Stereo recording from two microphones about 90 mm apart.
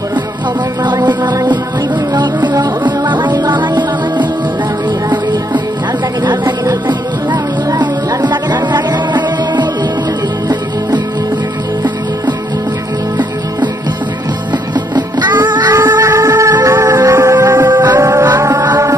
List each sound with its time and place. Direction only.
0.8 s music: 55° right (ahead or behind)
6.2 s music: 50° right (ahead or behind)
15.0 s music: 50° right (ahead or behind)
15.7 s music: 35° right (ahead or behind)